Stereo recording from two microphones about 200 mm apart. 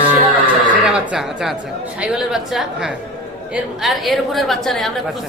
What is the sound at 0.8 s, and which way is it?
A man's voice, 5° right (ahead or behind).